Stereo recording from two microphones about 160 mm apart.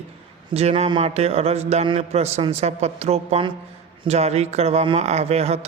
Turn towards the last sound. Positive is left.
turn(degrees=-40)  # may be behind; listen again after turning